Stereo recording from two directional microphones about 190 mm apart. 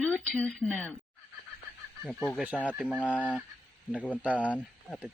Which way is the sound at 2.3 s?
Centre (ahead or behind).